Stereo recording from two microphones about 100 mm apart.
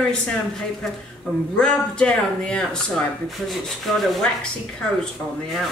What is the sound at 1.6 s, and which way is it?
Speech, 10° left (ahead or behind).